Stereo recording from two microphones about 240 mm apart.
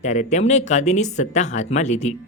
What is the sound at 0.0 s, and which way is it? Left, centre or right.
Speech, left.